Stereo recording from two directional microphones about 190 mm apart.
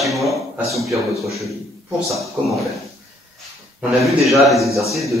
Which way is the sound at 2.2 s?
Centre (ahead or behind).